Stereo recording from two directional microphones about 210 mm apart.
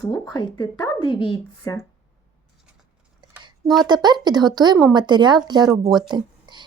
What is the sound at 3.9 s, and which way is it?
Speech, 20° right (ahead or behind).